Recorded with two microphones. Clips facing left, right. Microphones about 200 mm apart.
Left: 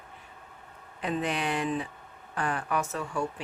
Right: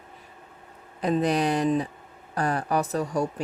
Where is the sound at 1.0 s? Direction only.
40° right (ahead or behind).